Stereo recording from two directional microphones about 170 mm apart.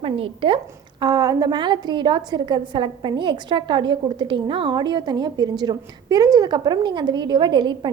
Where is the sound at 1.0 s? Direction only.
25° right (ahead or behind).